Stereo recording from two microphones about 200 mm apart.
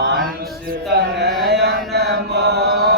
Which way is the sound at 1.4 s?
55° right (ahead or behind).